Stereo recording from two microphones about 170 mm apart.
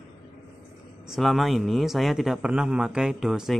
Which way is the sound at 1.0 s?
Centre (ahead or behind).